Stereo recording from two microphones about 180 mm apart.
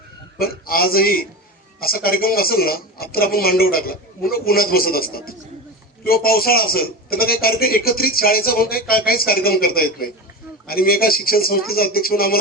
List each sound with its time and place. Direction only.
0.3 s a man's voice: 55° left (ahead or behind)